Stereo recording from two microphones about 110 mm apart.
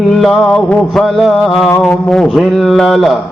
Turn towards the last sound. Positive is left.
turn(degrees=0)  # may be behind; listen again after turning